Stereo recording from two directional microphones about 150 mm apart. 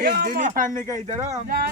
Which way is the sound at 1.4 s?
70° right (ahead or behind).